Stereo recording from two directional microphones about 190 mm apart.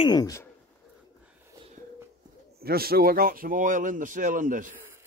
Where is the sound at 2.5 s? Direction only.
55° right (ahead or behind).